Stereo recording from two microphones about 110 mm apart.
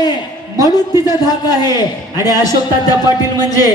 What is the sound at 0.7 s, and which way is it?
A man's voice, 35° left (ahead or behind).